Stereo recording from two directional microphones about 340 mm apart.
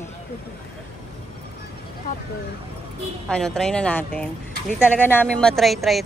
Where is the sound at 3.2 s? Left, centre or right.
Centre.